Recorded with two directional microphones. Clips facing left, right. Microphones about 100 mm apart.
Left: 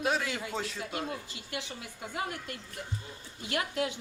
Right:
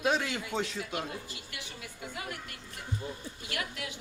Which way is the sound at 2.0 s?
25° left (ahead or behind).